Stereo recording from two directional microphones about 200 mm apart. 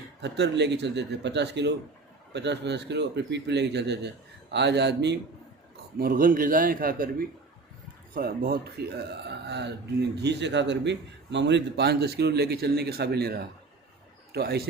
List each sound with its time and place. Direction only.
0.2 s speech: 60° right (ahead or behind)
6.0 s a man's voice: 45° right (ahead or behind)